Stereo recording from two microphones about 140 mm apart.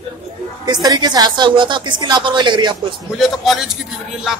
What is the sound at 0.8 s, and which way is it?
A woman's voice, 30° right (ahead or behind).